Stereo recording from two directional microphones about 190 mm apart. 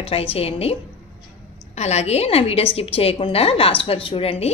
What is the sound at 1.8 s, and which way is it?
A woman's voice, 35° left (ahead or behind).